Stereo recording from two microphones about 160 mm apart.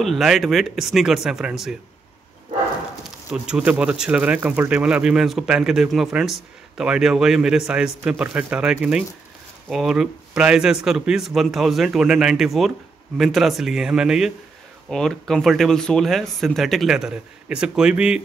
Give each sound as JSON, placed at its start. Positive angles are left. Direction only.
{"t": 0.0, "sound": "speech", "side_deg": 0}
{"t": 3.4, "sound": "speech", "side_deg": -5}